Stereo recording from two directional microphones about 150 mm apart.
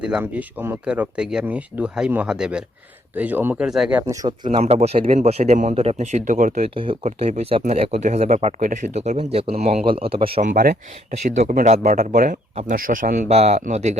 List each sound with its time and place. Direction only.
0.0 s speech: 10° right (ahead or behind)
4.0 s speech: 25° right (ahead or behind)
4.5 s speech: 45° right (ahead or behind); by 6.6 s 60° right (ahead or behind)
6.6 s speech: 35° right (ahead or behind)
7.0 s speech: 50° right (ahead or behind)
10.4 s speech: 70° right (ahead or behind)
11.3 s a man's voice: 55° right (ahead or behind)
13.2 s speech: 45° right (ahead or behind)